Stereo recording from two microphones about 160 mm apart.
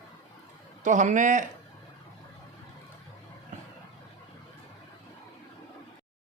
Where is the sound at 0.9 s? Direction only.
50° right (ahead or behind).